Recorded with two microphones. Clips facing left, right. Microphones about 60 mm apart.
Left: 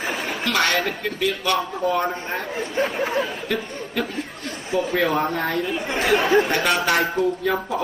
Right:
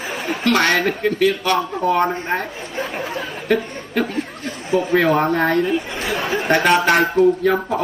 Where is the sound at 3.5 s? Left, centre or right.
Right.